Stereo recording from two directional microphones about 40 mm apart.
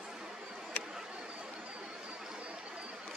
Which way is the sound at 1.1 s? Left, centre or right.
Right.